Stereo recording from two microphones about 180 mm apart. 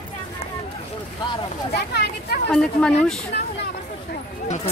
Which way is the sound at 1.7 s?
65° left (ahead or behind).